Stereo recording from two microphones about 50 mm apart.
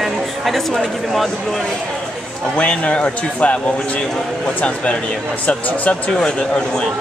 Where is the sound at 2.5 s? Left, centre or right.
Left.